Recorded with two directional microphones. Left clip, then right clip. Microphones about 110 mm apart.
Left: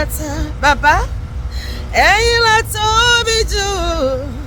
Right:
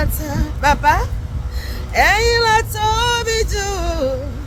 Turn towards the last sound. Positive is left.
turn(degrees=50)  # may be behind; listen again after turning